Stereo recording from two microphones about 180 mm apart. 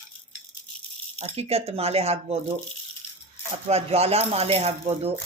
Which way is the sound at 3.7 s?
35° right (ahead or behind).